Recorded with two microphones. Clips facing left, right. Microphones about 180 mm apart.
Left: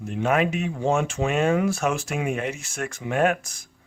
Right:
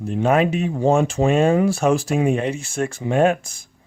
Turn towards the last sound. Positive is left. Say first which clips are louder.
# right 5 dB
turn(degrees=-30)  # may be behind; listen again after turning